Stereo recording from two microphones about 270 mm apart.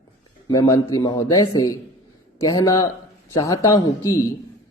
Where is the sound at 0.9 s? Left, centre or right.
Centre.